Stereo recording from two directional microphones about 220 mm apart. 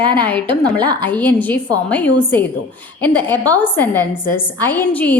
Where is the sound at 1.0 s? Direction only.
10° left (ahead or behind).